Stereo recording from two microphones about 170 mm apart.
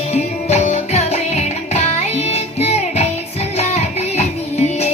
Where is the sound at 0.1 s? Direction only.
40° left (ahead or behind).